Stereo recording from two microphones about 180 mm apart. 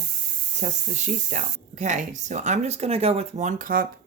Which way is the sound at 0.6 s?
40° right (ahead or behind).